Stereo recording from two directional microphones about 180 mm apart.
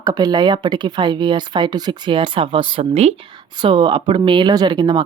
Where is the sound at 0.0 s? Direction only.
20° right (ahead or behind).